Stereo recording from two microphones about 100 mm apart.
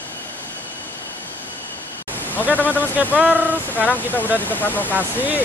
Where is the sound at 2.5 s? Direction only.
15° left (ahead or behind).